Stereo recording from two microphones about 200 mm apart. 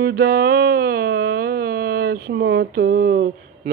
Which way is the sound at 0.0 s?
50° right (ahead or behind).